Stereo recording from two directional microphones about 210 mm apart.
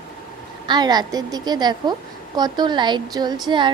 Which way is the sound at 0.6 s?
20° right (ahead or behind).